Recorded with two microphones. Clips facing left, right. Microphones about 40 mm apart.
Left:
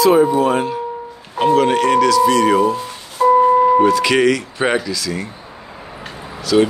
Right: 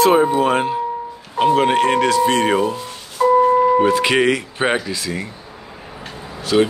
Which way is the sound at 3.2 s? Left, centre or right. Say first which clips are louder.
Left 2 dB; centre.